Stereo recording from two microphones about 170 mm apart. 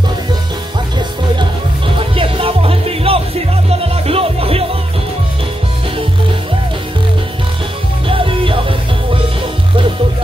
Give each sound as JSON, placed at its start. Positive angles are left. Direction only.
{"t": 2.0, "sound": "music", "side_deg": -30}
{"t": 8.1, "sound": "music", "side_deg": -30}